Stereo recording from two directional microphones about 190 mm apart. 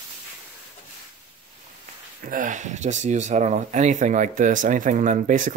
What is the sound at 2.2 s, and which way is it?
Speech, 45° right (ahead or behind).